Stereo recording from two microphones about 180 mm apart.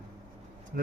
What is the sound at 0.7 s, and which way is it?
Speech, 60° right (ahead or behind).